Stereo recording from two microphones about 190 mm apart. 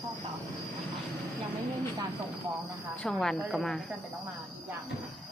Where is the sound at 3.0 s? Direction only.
5° left (ahead or behind).